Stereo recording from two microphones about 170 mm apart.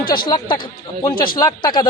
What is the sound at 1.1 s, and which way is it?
Speech, 60° left (ahead or behind).